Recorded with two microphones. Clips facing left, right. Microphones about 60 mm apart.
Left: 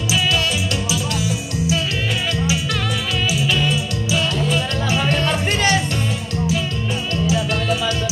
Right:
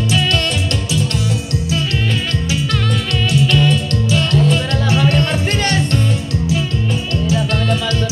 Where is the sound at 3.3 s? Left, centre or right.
Centre.